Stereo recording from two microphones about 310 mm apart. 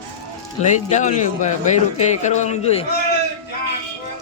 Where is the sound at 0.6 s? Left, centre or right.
Left.